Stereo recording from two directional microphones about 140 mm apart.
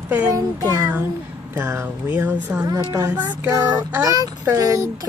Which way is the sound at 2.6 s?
20° right (ahead or behind).